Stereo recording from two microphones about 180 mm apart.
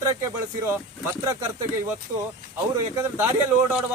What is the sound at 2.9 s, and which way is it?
Speech, 15° right (ahead or behind).